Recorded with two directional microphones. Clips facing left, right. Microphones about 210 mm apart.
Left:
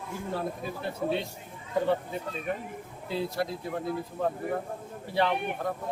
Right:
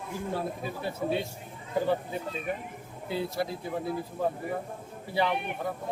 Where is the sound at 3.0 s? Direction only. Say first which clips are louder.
Even; centre (ahead or behind).